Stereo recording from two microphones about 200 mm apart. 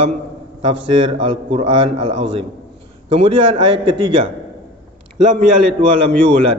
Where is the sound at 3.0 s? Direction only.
25° right (ahead or behind).